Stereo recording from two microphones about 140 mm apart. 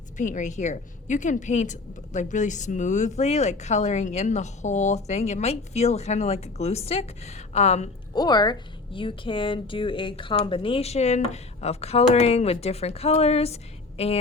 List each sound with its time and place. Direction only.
0.2 s a woman's voice: 60° left (ahead or behind)
8.1 s a woman's voice: 30° left (ahead or behind); by 14.2 s 50° left (ahead or behind)